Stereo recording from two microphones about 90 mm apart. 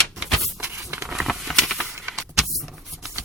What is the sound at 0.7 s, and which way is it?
Patter, 30° right (ahead or behind).